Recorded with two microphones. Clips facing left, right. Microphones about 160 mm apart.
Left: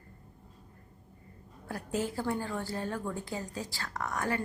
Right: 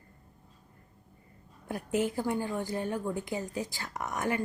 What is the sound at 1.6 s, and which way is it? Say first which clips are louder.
A woman's voice: right 4 dB; 20° right (ahead or behind).